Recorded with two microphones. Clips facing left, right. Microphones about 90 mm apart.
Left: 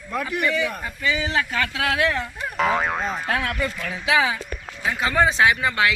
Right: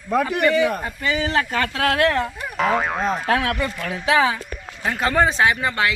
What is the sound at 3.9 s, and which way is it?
Speech, 40° right (ahead or behind).